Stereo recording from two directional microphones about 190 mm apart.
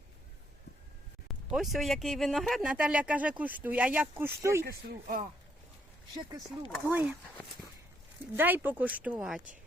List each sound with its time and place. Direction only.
1.5 s speech: centre (ahead or behind)
4.6 s speech: 45° right (ahead or behind)
6.8 s speech: 10° right (ahead or behind)
8.4 s speech: 10° right (ahead or behind)